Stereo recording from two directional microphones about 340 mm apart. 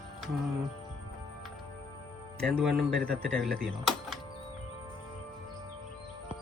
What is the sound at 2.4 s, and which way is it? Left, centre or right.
Speech, centre.